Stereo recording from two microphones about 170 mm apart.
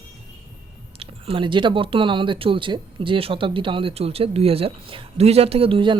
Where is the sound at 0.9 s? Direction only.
30° right (ahead or behind).